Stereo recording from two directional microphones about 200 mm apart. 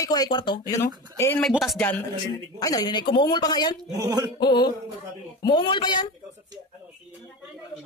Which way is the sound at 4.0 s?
20° right (ahead or behind).